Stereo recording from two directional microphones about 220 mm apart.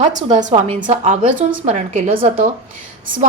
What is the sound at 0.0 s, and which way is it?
A woman's voice, 30° right (ahead or behind).